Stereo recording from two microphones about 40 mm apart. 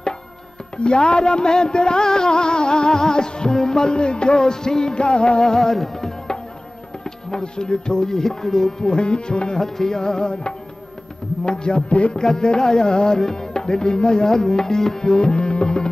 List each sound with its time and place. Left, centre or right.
0.7 s music: left
5.4 s music: centre
9.6 s music: centre; by 12.2 s left
12.2 s music: centre